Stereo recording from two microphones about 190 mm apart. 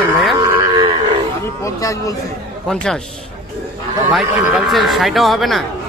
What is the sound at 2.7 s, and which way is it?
Speech, 5° left (ahead or behind).